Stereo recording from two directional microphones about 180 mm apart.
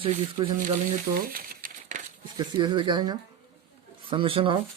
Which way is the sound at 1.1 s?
50° right (ahead or behind).